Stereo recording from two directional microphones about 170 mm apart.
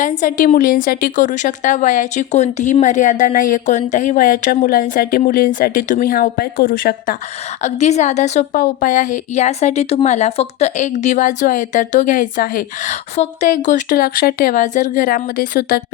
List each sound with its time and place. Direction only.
0.0 s a woman's voice: 50° left (ahead or behind)
7.6 s a woman's voice: 40° left (ahead or behind); by 15.8 s 60° left (ahead or behind)